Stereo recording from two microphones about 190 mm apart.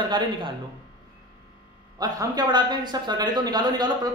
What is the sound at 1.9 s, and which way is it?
Speech, 20° right (ahead or behind).